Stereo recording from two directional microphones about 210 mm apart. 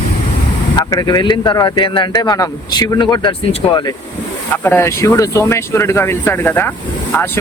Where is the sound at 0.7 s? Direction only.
15° left (ahead or behind).